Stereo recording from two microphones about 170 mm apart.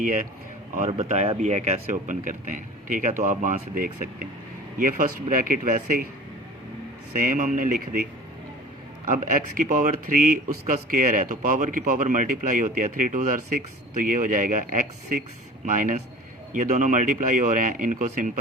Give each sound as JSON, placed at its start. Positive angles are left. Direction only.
{"t": 0.0, "sound": "speech", "side_deg": -50}
{"t": 7.2, "sound": "speech", "side_deg": -50}
{"t": 9.0, "sound": "speech", "side_deg": -50}